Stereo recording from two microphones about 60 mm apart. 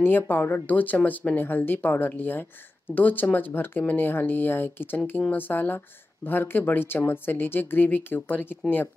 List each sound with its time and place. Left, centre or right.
0.0 s speech: left